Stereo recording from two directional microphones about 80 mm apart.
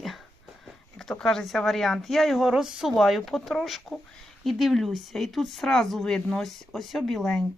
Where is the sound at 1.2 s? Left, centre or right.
Centre.